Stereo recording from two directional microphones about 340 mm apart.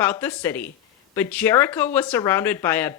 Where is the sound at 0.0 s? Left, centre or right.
Centre.